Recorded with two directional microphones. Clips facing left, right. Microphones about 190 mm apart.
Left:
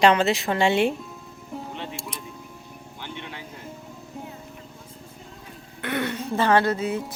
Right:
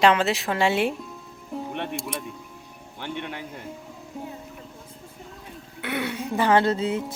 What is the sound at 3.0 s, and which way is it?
Music, 55° right (ahead or behind).